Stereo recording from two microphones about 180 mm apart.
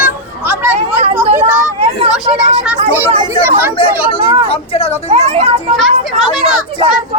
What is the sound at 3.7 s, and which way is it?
Chatter, 30° left (ahead or behind).